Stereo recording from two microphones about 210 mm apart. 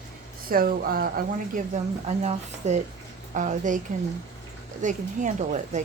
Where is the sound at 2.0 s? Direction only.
35° right (ahead or behind).